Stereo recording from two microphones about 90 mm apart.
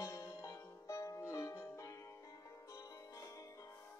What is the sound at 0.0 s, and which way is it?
Music, 35° left (ahead or behind).